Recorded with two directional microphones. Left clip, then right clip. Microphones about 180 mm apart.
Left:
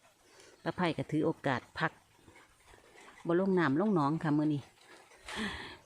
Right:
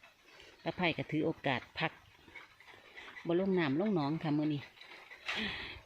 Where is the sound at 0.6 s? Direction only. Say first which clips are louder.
Left 1 dB; 15° left (ahead or behind).